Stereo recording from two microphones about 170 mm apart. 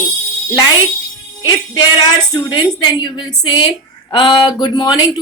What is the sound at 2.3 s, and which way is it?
A man's voice, 25° left (ahead or behind).